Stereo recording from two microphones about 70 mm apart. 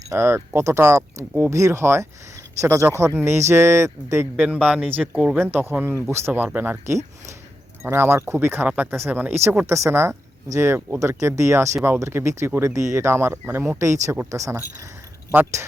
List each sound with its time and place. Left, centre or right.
0.1 s speech: right
4.4 s speech: right
5.0 s speech: centre
5.4 s speech: right
7.9 s speech: right
8.6 s speech: centre
8.9 s speech: right
13.7 s speech: right